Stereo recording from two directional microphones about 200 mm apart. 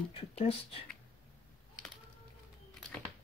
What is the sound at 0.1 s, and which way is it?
Speech, 30° left (ahead or behind).